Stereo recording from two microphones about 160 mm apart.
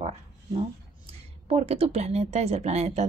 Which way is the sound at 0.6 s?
40° right (ahead or behind).